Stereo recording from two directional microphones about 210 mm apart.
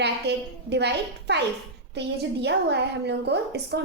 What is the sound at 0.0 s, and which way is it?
A woman's voice, 55° right (ahead or behind).